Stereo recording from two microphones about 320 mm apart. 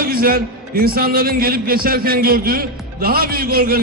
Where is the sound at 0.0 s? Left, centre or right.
Right.